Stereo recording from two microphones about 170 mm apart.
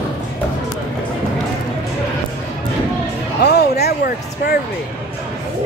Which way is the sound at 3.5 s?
75° left (ahead or behind).